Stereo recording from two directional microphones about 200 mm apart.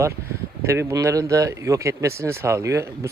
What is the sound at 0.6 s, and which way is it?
Speech, 15° right (ahead or behind).